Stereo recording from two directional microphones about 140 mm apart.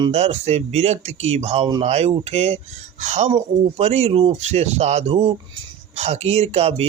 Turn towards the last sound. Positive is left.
turn(degrees=-45)  # may be behind; listen again after turning